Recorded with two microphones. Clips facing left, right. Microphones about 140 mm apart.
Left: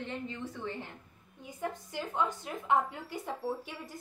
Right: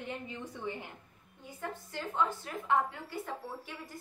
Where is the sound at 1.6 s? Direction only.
15° left (ahead or behind).